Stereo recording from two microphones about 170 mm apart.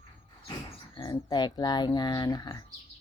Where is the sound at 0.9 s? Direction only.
25° left (ahead or behind).